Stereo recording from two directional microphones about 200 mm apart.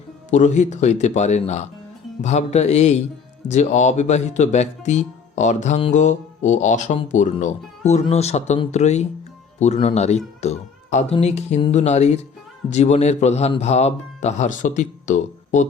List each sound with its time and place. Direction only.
0.3 s speech: 35° left (ahead or behind)